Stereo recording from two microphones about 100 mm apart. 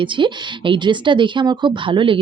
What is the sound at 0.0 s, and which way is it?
Speech, 55° right (ahead or behind).